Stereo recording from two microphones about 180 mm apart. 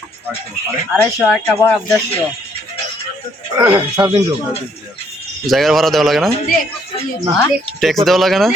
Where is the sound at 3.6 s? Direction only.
25° right (ahead or behind).